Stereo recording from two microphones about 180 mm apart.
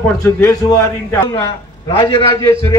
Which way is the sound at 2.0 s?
30° left (ahead or behind).